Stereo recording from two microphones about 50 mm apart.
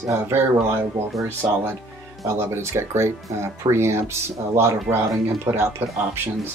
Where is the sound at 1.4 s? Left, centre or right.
Right.